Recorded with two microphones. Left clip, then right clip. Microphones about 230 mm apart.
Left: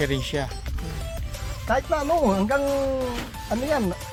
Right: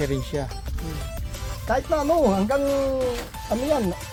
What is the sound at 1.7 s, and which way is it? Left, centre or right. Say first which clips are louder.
Speech: right 1 dB; centre.